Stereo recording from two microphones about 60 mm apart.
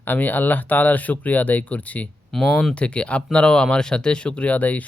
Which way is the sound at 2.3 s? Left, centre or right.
Centre.